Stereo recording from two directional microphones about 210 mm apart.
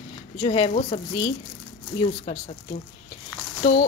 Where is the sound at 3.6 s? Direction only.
25° left (ahead or behind).